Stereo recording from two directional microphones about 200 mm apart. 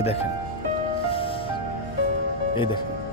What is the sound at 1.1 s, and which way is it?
Music, 25° left (ahead or behind).